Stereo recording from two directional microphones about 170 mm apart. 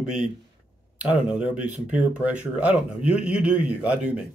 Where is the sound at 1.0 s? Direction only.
5° right (ahead or behind).